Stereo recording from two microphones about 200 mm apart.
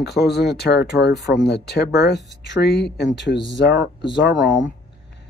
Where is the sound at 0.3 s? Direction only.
55° left (ahead or behind).